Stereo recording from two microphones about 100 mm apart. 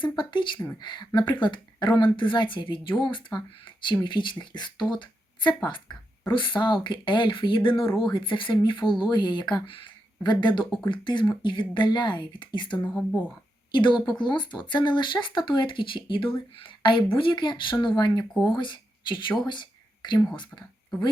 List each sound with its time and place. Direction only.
0.0 s speech: 50° left (ahead or behind)
12.9 s speech: 15° left (ahead or behind)
13.7 s speech: 50° left (ahead or behind)